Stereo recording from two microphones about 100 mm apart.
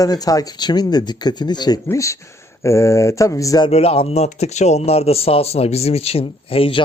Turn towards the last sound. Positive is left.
turn(degrees=65)  # may be behind; listen again after turning